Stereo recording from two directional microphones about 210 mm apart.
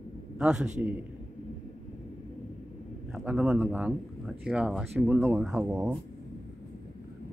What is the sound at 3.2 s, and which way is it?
A man's voice, 5° right (ahead or behind).